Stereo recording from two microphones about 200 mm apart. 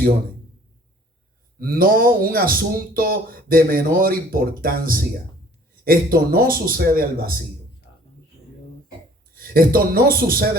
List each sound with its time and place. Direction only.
1.5 s a man's voice: 45° right (ahead or behind)
9.3 s a man's voice: 45° right (ahead or behind)